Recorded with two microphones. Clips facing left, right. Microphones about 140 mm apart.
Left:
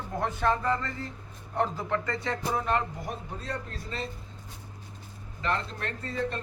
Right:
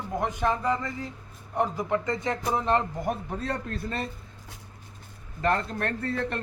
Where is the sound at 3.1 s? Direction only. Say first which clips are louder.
Right 6 dB; 60° right (ahead or behind).